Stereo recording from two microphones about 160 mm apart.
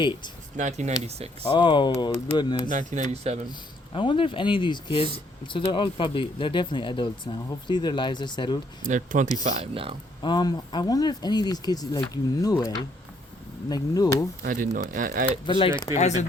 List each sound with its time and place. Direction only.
0.0 s speech: 30° left (ahead or behind)
0.5 s speech: 50° right (ahead or behind)
1.5 s speech: 30° left (ahead or behind)
2.6 s speech: 50° right (ahead or behind)
3.9 s speech: 30° left (ahead or behind)
8.8 s speech: 50° right (ahead or behind)
10.2 s speech: 25° left (ahead or behind)
14.4 s speech: 60° right (ahead or behind)
15.4 s speech: 30° left (ahead or behind)